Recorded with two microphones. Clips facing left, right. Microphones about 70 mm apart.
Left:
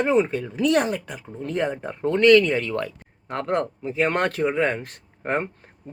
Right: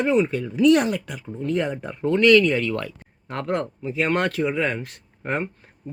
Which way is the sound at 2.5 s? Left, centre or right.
Left.